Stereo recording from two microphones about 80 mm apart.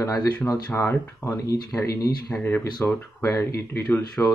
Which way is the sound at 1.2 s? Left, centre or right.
Left.